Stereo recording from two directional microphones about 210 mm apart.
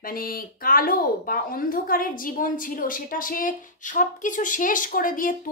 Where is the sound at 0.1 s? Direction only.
45° left (ahead or behind).